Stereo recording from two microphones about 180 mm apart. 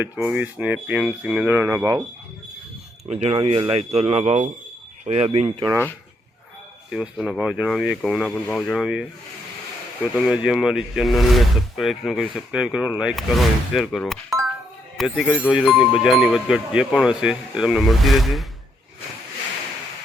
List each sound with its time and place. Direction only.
0.0 s speech: 10° right (ahead or behind)
3.1 s speech: 35° right (ahead or behind)
6.9 s speech: 5° right (ahead or behind)
10.2 s a man's voice: 5° right (ahead or behind)